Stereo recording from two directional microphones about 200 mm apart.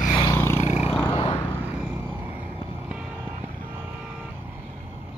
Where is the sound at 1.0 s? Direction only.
25° left (ahead or behind).